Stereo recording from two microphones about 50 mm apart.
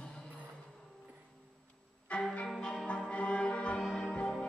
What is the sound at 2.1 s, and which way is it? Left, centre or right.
Music, left.